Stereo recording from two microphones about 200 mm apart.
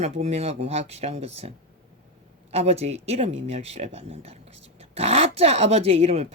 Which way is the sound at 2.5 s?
30° right (ahead or behind).